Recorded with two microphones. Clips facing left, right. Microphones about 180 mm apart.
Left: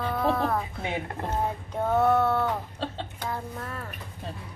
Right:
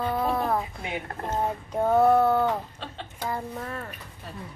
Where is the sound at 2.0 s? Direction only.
25° right (ahead or behind).